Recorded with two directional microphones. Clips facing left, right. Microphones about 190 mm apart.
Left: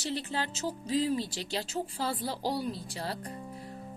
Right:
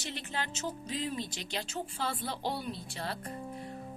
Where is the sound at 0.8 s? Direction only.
35° left (ahead or behind).